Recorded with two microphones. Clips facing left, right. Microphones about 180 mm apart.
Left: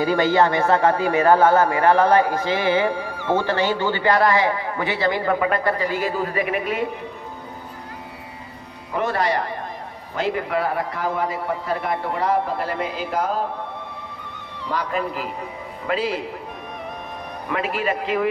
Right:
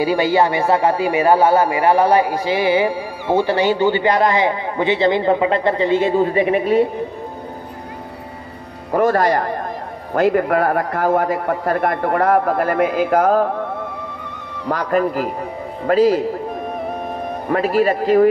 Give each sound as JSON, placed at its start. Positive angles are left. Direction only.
{"t": 0.0, "sound": "a man's voice", "side_deg": -10}
{"t": 8.9, "sound": "a man's voice", "side_deg": -45}
{"t": 17.5, "sound": "a man's voice", "side_deg": -40}